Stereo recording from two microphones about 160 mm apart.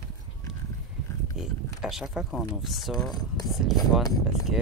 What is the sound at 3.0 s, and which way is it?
Speech, 25° left (ahead or behind).